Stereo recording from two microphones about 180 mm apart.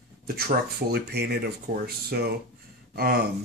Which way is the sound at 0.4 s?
60° right (ahead or behind).